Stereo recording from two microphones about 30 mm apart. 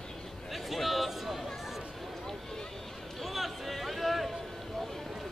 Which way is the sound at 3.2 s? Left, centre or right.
Centre.